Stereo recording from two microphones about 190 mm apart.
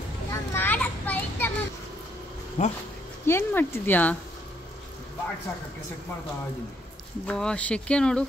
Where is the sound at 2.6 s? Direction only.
40° left (ahead or behind).